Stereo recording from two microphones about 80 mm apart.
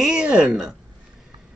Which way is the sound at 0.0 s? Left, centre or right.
Centre.